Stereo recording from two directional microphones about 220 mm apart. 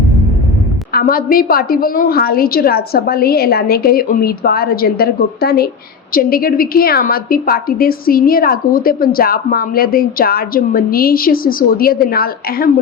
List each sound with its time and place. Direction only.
0.9 s a woman's voice: 40° left (ahead or behind)